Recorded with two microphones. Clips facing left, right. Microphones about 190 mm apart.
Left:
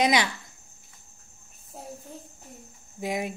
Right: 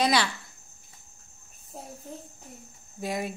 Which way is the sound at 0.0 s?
15° left (ahead or behind).